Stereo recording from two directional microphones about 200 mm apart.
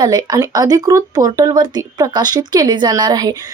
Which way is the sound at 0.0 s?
20° right (ahead or behind).